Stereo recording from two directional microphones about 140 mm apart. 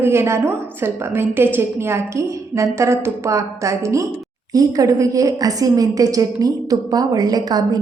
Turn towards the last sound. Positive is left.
turn(degrees=-30)  # may be behind; listen again after turning